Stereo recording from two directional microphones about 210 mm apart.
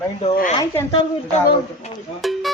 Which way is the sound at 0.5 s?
20° left (ahead or behind).